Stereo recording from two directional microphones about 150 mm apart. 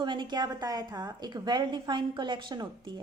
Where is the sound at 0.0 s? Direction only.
30° right (ahead or behind).